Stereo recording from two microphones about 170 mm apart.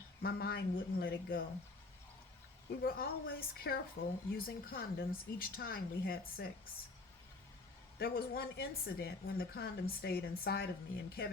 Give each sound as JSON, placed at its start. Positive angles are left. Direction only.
{"t": 0.2, "sound": "speech", "side_deg": 65}
{"t": 2.8, "sound": "speech", "side_deg": 60}
{"t": 7.9, "sound": "speech", "side_deg": 65}